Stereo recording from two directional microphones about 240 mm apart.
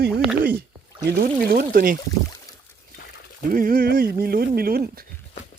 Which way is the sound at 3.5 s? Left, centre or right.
Right.